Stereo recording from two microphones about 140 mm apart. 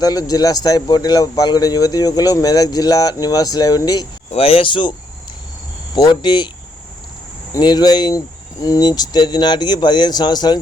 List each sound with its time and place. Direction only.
0.0 s speech: 25° left (ahead or behind)
4.3 s speech: 45° left (ahead or behind)
7.5 s speech: 30° left (ahead or behind)